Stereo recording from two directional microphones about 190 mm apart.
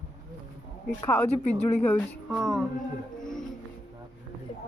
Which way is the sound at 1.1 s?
5° left (ahead or behind).